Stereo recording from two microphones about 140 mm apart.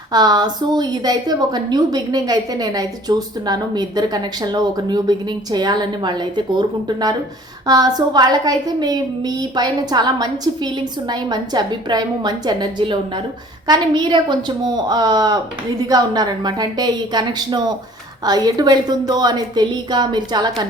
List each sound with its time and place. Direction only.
0.1 s a woman's voice: 30° right (ahead or behind)